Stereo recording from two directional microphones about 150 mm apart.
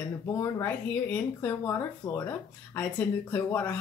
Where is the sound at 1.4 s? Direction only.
20° left (ahead or behind).